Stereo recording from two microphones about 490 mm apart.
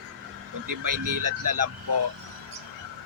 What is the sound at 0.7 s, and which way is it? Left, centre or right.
Speech, right.